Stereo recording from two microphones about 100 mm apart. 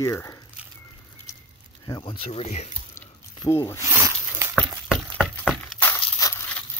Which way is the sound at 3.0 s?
30° left (ahead or behind).